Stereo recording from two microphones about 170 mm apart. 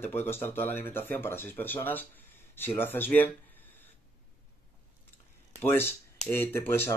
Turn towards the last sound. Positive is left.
turn(degrees=15)  # may be behind; listen again after turning